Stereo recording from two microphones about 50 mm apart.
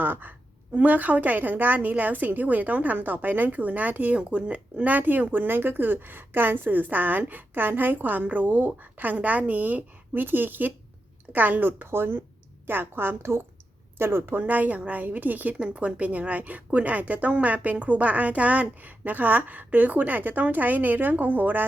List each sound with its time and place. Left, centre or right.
0.0 s a woman's voice: right